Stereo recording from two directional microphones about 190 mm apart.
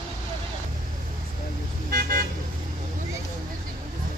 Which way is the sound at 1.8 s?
50° right (ahead or behind).